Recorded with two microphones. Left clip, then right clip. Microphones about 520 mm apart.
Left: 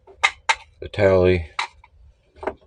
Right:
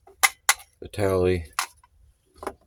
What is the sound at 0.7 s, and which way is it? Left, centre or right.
Speech, right.